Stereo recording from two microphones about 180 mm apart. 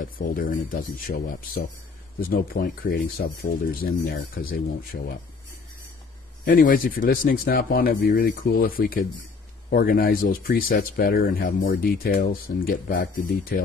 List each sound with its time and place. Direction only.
0.0 s speech: 50° left (ahead or behind)
6.4 s speech: 50° left (ahead or behind)